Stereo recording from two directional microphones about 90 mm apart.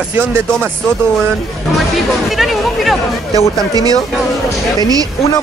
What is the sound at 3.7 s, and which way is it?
Speech, 45° right (ahead or behind).